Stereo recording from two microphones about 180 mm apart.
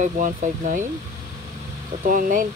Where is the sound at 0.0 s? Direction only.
45° right (ahead or behind).